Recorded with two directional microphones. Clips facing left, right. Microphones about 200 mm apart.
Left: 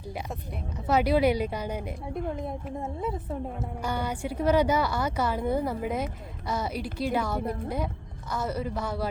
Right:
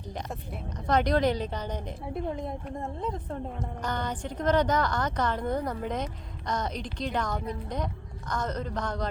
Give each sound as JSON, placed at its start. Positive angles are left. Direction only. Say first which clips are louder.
{"t": 0.9, "sound": "a woman's voice", "louder": "left 2 dB", "side_deg": 5}